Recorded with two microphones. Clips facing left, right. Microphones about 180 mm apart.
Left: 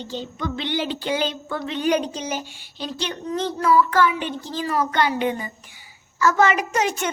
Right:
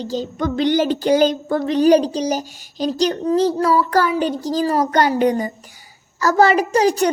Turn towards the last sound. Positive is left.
turn(degrees=-35)  # may be behind; listen again after turning